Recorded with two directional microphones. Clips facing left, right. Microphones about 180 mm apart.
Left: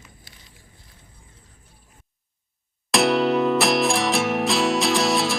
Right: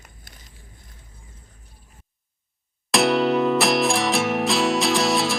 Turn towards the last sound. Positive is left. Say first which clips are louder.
# even
turn(degrees=0)  # may be behind; listen again after turning